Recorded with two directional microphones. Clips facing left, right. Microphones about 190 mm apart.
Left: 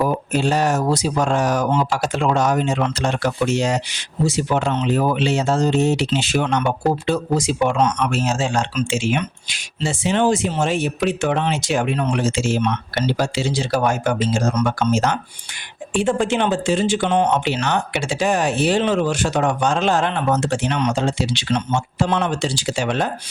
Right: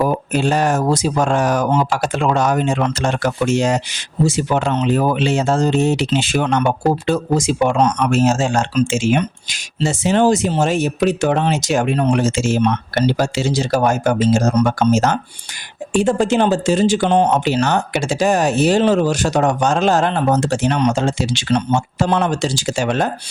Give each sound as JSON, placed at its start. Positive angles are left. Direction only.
{"t": 0.0, "sound": "speech", "side_deg": -55}